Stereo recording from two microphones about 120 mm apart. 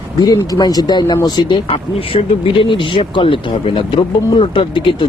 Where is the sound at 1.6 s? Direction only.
50° left (ahead or behind).